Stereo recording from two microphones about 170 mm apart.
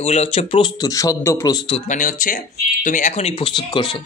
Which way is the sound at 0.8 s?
20° left (ahead or behind).